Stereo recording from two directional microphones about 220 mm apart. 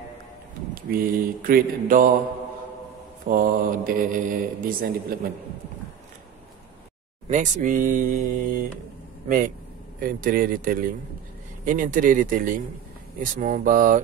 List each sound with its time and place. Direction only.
0.8 s speech: 45° right (ahead or behind)
3.3 s speech: 40° right (ahead or behind)
7.2 s speech: 35° right (ahead or behind)
9.9 s speech: 40° right (ahead or behind)